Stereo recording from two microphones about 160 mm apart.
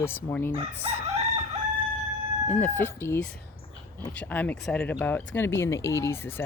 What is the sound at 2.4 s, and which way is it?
Speech, 15° left (ahead or behind).